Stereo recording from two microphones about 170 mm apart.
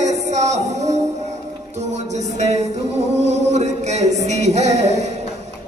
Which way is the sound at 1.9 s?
40° right (ahead or behind).